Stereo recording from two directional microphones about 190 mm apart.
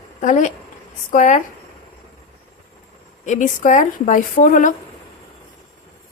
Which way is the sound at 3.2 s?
40° left (ahead or behind).